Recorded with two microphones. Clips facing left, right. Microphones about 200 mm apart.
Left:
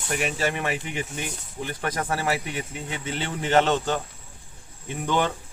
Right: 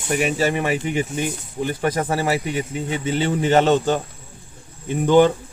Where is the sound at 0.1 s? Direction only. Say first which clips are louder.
Right 6 dB; 5° right (ahead or behind).